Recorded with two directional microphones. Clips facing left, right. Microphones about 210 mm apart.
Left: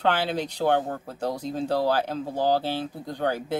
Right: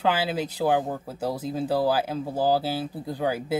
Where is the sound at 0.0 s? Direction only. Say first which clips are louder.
Even; 5° right (ahead or behind).